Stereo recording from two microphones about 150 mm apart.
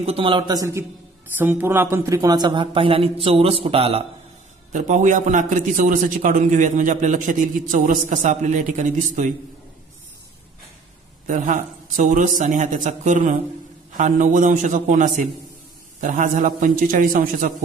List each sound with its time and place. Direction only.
0.0 s a man's voice: 40° right (ahead or behind)
4.7 s a man's voice: 55° right (ahead or behind)
11.2 s a man's voice: 60° right (ahead or behind)